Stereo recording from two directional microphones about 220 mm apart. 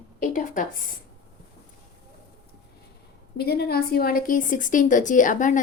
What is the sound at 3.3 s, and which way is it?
Speech, 45° left (ahead or behind).